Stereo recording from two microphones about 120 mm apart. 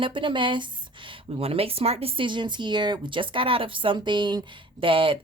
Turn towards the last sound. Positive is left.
turn(degrees=-45)  # may be behind; listen again after turning